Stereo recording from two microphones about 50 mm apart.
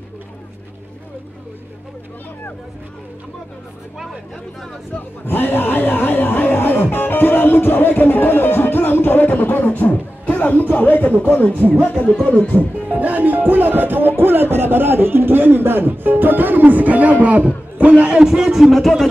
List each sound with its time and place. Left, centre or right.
5.2 s music: left
11.2 s speech: left
12.8 s speech: right
17.7 s a sound: right
18.2 s speech: centre